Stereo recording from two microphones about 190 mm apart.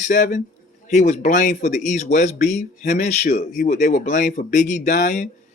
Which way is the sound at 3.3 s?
50° left (ahead or behind).